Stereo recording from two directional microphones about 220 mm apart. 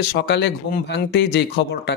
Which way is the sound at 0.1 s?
50° left (ahead or behind).